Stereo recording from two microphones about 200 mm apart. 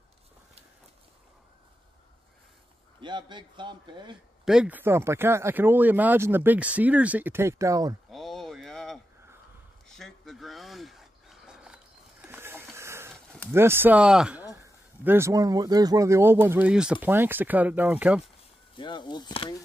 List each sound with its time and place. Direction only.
3.0 s a man's voice: 25° right (ahead or behind)
4.5 s speech: 5° right (ahead or behind)
8.1 s a sound: centre (ahead or behind)
13.5 s speech: 10° right (ahead or behind)
18.8 s speech: 25° left (ahead or behind)